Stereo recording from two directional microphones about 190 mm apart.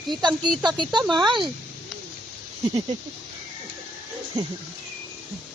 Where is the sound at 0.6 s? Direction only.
25° right (ahead or behind).